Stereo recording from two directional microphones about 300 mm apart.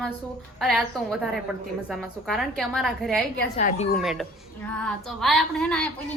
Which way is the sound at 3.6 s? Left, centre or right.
Left.